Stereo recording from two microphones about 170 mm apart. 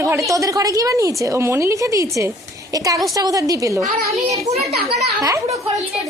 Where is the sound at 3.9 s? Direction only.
65° right (ahead or behind).